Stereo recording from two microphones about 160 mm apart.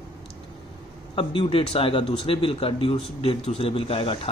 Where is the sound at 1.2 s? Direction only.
35° left (ahead or behind).